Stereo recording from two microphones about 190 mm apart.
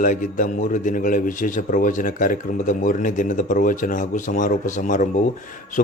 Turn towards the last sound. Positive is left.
turn(degrees=45)  # may be behind; listen again after turning